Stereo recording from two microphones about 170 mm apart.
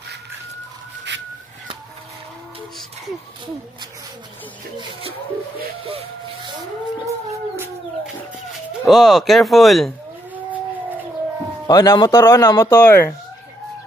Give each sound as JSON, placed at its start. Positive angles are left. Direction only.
{"t": 5.9, "sound": "a sound", "side_deg": -35}
{"t": 8.5, "sound": "speech", "side_deg": 0}
{"t": 11.6, "sound": "speech", "side_deg": 20}